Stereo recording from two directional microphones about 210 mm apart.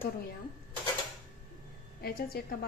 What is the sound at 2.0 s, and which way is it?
Speech, 45° left (ahead or behind).